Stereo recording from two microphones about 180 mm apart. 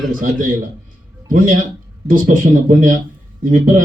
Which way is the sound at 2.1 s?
50° right (ahead or behind).